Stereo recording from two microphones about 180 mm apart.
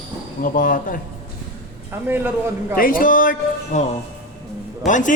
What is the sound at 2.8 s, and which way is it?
Speech, 50° left (ahead or behind).